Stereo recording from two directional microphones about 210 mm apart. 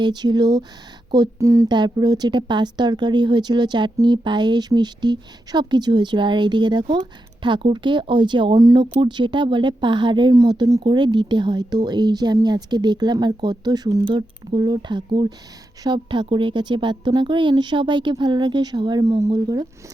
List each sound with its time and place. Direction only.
0.0 s speech: 20° right (ahead or behind)